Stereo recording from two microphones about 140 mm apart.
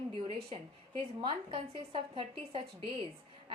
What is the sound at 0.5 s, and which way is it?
Speech, 55° right (ahead or behind).